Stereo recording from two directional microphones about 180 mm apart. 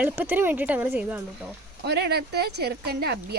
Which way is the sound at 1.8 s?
65° right (ahead or behind).